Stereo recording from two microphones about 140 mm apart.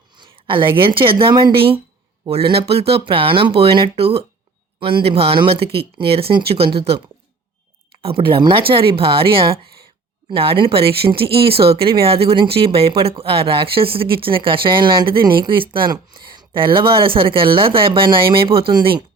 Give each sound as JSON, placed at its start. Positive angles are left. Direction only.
{"t": 0.2, "sound": "a woman's voice", "side_deg": -35}
{"t": 8.0, "sound": "speech", "side_deg": -40}